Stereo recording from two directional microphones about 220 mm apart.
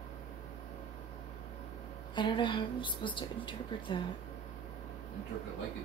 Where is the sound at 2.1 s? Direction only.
20° left (ahead or behind).